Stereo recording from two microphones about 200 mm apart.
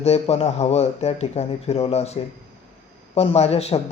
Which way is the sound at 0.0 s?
30° left (ahead or behind).